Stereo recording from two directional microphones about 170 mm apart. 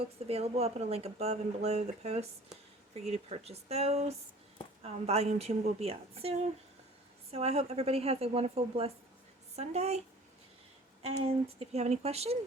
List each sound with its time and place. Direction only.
0.0 s a woman's voice: 35° right (ahead or behind)
11.0 s a woman's voice: 35° right (ahead or behind)